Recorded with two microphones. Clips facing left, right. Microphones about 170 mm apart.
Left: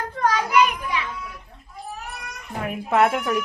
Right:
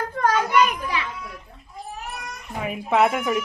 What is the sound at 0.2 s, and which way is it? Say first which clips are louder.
Children playing: even; 50° right (ahead or behind).